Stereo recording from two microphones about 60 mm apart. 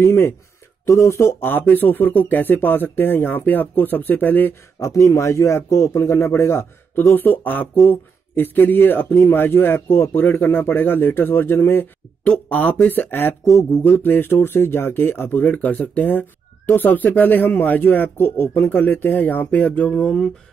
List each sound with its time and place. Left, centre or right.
0.0 s a man's voice: left
0.8 s speech: left
1.4 s speech: left
4.7 s a man's voice: left
12.3 s speech: left